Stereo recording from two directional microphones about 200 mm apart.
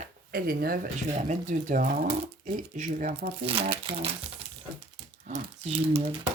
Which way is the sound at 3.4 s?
25° right (ahead or behind).